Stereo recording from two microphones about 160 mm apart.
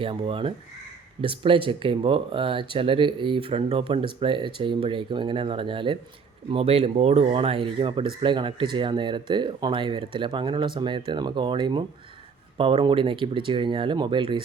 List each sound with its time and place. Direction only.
0.0 s speech: 35° right (ahead or behind)